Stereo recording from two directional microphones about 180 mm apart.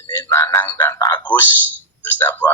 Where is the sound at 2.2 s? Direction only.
10° left (ahead or behind).